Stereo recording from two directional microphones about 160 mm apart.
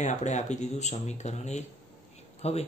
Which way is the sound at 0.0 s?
50° left (ahead or behind).